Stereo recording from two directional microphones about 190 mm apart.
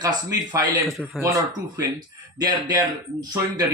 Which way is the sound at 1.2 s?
15° right (ahead or behind).